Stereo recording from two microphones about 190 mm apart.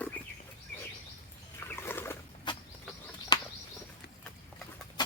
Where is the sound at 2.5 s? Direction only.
25° left (ahead or behind).